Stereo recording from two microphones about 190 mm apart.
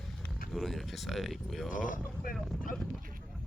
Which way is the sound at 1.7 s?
45° left (ahead or behind).